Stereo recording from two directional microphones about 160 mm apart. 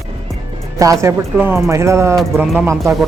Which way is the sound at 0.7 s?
20° right (ahead or behind).